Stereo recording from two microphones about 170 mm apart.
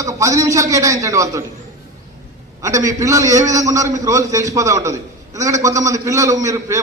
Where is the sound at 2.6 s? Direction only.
20° right (ahead or behind).